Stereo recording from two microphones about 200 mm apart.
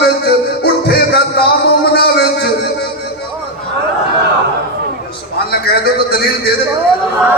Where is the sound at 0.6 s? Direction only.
50° left (ahead or behind).